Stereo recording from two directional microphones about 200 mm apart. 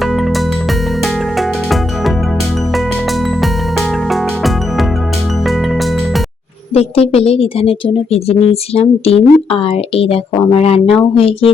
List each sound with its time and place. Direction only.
0.0 s music: centre (ahead or behind)
6.7 s speech: 30° left (ahead or behind)